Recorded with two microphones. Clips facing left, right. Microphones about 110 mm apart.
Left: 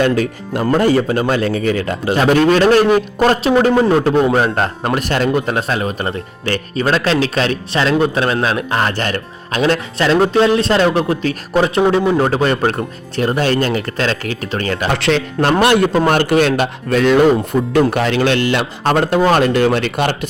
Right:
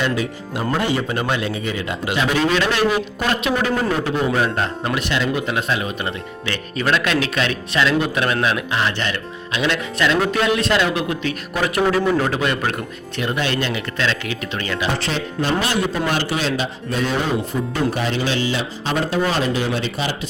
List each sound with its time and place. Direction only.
0.0 s speech: 50° left (ahead or behind); by 3.9 s 30° left (ahead or behind)
3.9 s speech: 55° left (ahead or behind)
4.3 s speech: 35° left (ahead or behind)
12.2 s speech: 35° left (ahead or behind)
14.9 s speech: 75° left (ahead or behind)
15.6 s speech: 60° left (ahead or behind)